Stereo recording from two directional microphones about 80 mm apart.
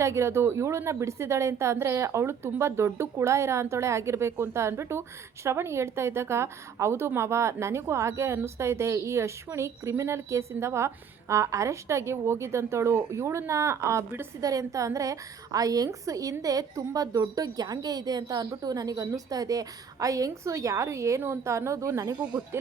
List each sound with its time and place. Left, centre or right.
0.0 s a woman's voice: right
14.4 s a woman's voice: right